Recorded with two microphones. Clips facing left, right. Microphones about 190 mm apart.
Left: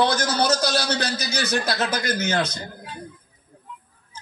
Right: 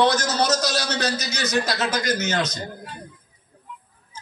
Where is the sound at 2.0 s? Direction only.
55° left (ahead or behind).